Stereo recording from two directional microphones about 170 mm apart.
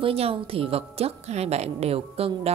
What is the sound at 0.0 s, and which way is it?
A woman's voice, 35° right (ahead or behind).